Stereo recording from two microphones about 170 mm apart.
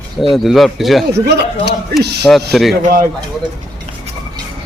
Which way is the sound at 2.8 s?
55° right (ahead or behind).